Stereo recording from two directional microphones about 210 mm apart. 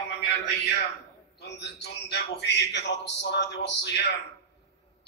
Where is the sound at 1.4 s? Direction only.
55° left (ahead or behind).